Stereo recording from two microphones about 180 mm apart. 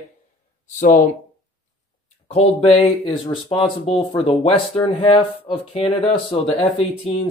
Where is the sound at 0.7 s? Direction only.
50° left (ahead or behind).